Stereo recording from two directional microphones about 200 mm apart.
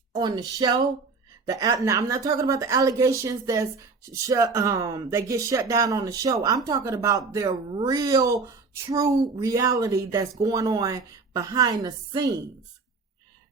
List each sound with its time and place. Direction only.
0.1 s a woman's voice: 20° right (ahead or behind)